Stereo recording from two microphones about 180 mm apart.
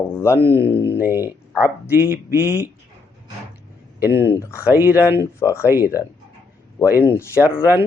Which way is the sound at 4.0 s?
15° right (ahead or behind).